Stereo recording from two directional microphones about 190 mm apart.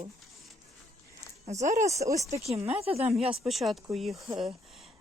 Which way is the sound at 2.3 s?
35° right (ahead or behind).